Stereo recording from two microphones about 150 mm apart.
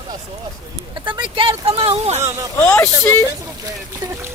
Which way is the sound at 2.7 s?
15° left (ahead or behind).